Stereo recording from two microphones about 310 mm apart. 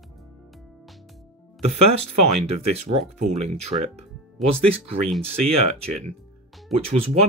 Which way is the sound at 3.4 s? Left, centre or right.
Right.